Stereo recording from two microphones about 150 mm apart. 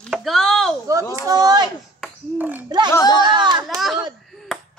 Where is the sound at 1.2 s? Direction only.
25° right (ahead or behind).